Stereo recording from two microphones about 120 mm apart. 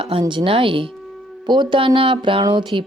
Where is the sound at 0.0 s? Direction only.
45° right (ahead or behind).